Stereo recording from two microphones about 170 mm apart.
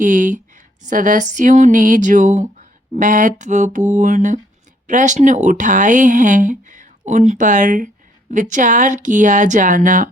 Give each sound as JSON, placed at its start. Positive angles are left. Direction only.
{"t": 0.0, "sound": "speech", "side_deg": -50}